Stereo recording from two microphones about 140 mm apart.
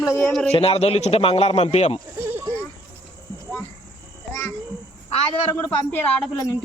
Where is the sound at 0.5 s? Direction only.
45° left (ahead or behind).